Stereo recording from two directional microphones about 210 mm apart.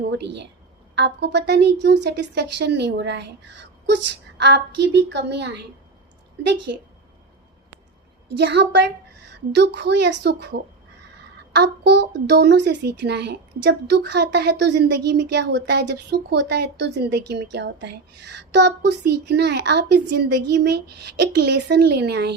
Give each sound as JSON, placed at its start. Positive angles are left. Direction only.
{"t": 0.9, "sound": "a woman's voice", "side_deg": -55}
{"t": 8.4, "sound": "a woman's voice", "side_deg": -55}